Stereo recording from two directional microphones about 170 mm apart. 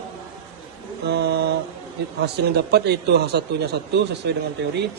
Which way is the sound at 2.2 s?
75° right (ahead or behind).